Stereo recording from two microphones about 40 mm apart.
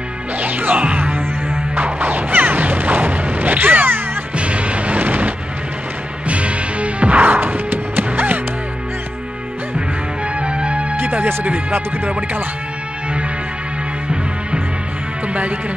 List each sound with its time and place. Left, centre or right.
0.4 s music: right
4.4 s a sound: right
6.2 s music: right
7.3 s music: right
10.4 s music: right
11.0 s music: right
11.4 s speech: right